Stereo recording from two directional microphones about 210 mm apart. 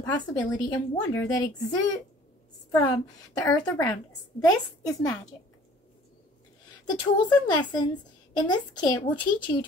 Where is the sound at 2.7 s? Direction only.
20° left (ahead or behind).